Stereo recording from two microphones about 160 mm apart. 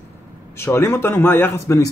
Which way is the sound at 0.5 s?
15° left (ahead or behind).